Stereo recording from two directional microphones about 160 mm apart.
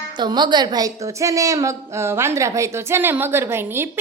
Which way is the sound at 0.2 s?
25° right (ahead or behind).